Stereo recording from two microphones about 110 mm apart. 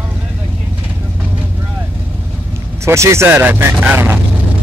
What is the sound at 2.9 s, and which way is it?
Speech, 25° right (ahead or behind).